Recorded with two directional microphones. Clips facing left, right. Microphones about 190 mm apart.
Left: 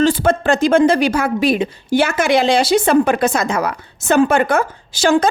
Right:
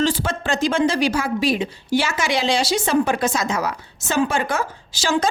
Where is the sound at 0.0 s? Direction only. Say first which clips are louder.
Left 7 dB; 55° left (ahead or behind).